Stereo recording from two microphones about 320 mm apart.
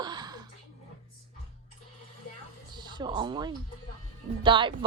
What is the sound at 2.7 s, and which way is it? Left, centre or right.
Speech, centre.